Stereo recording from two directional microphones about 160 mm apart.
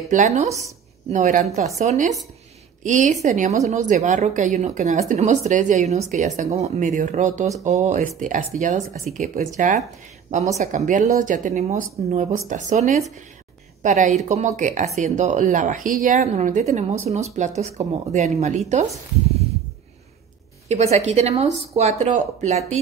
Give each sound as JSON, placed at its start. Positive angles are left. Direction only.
{"t": 0.1, "sound": "speech", "side_deg": -45}
{"t": 20.6, "sound": "speech", "side_deg": -40}